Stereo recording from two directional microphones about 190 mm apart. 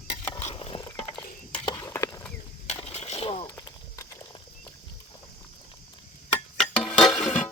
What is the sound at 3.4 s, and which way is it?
Walk, 20° left (ahead or behind).